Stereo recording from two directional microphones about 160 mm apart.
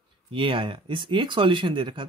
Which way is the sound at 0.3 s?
35° right (ahead or behind).